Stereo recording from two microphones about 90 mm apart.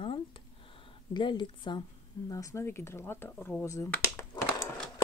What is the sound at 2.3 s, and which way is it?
Speech, 35° left (ahead or behind).